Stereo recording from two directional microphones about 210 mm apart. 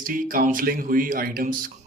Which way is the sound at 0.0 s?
40° right (ahead or behind).